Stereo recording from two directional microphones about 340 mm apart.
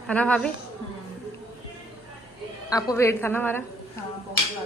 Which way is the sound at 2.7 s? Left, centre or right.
Centre.